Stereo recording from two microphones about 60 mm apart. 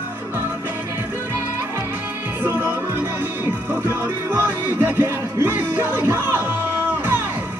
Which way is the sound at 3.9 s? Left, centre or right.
Right.